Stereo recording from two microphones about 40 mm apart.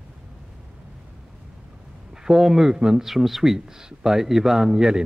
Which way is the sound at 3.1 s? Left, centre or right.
Centre.